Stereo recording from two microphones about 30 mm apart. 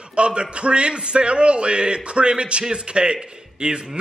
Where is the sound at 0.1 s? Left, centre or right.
Right.